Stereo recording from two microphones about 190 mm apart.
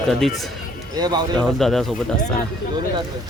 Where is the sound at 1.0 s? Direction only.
20° right (ahead or behind).